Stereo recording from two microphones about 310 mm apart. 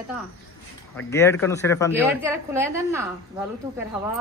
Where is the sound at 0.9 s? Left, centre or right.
Centre.